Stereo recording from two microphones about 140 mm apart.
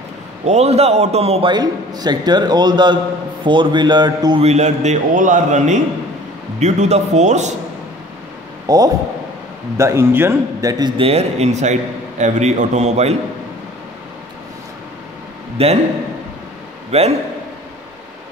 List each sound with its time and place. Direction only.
0.5 s a man's voice: 50° right (ahead or behind)
1.5 s a man's voice: 30° right (ahead or behind)
4.4 s a man's voice: 50° right (ahead or behind)
8.6 s a man's voice: 25° right (ahead or behind)
11.1 s a man's voice: 50° right (ahead or behind)
15.5 s a man's voice: 45° right (ahead or behind)
16.9 s a man's voice: 50° right (ahead or behind)